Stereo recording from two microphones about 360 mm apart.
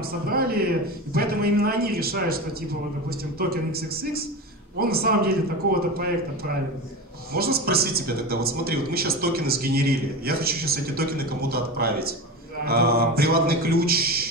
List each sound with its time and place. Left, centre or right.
0.3 s speech: right
7.3 s speech: right